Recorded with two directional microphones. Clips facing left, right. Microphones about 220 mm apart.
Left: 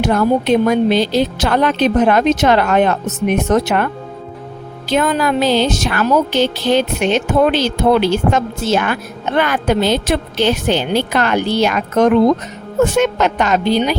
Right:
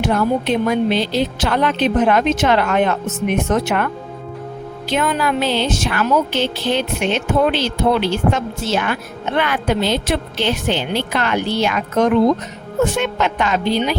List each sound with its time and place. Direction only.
0.0 s speech: 40° left (ahead or behind)
4.9 s a woman's voice: 40° left (ahead or behind)